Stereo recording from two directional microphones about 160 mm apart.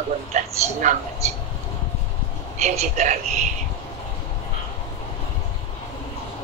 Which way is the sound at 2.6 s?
50° right (ahead or behind).